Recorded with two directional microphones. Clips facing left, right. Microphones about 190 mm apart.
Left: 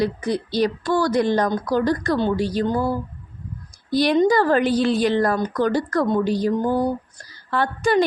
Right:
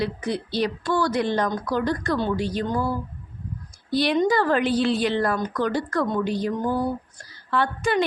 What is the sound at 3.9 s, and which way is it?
A woman's voice, 40° left (ahead or behind).